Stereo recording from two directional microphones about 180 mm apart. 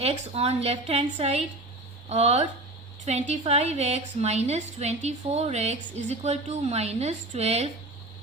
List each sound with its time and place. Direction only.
0.0 s a woman's voice: 35° right (ahead or behind)